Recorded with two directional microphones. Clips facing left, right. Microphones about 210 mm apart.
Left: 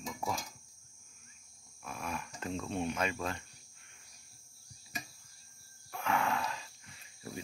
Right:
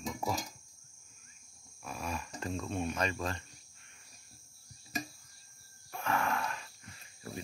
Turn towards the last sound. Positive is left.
turn(degrees=15)  # may be behind; listen again after turning